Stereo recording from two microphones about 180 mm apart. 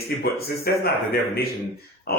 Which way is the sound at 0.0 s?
60° left (ahead or behind).